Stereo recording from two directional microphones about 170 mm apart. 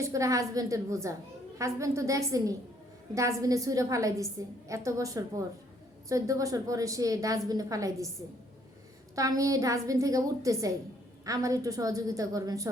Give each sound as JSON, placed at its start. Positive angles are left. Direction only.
{"t": 0.0, "sound": "a woman's voice", "side_deg": -20}
{"t": 9.1, "sound": "a woman's voice", "side_deg": -20}